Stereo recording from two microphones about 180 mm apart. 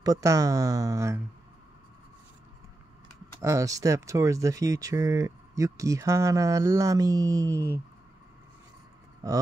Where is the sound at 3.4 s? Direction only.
20° right (ahead or behind).